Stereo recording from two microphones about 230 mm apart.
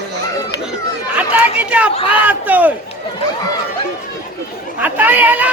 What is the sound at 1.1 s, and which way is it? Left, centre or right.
Chatter, centre.